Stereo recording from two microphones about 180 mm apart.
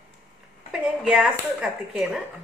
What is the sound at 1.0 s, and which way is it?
Speech, 5° right (ahead or behind).